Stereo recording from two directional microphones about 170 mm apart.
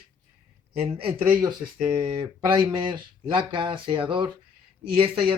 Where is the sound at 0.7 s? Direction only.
35° right (ahead or behind).